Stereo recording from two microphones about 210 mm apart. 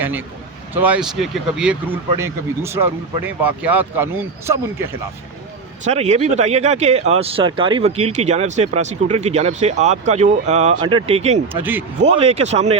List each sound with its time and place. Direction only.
0.0 s a man's voice: 10° right (ahead or behind)
5.8 s speech: 30° right (ahead or behind)
11.6 s speech: 10° right (ahead or behind)
12.0 s speech: 30° right (ahead or behind)